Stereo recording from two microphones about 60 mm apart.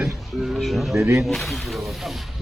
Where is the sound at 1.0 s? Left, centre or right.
Right.